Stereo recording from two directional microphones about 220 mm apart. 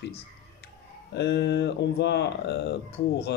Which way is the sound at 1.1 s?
50° left (ahead or behind).